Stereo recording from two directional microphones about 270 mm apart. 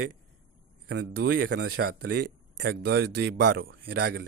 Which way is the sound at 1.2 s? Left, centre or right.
Right.